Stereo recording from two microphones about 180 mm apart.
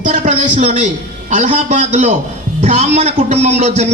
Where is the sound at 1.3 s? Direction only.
40° right (ahead or behind).